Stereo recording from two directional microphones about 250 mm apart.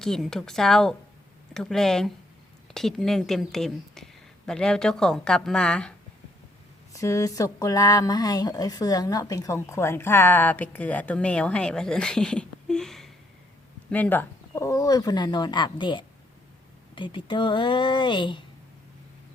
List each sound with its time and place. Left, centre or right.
0.0 s speech: centre
6.9 s a woman's voice: centre